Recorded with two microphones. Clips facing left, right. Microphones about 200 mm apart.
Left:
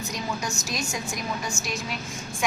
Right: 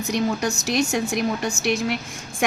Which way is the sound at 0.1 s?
65° right (ahead or behind).